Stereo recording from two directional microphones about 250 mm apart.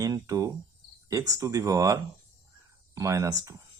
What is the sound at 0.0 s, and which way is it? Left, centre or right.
Cricket, centre.